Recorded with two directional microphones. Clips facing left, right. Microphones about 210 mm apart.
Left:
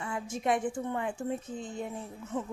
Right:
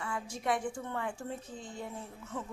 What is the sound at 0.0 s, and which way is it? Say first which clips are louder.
A woman's voice: left 4 dB; 20° left (ahead or behind).